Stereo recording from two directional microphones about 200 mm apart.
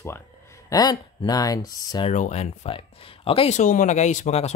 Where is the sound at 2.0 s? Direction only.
35° left (ahead or behind).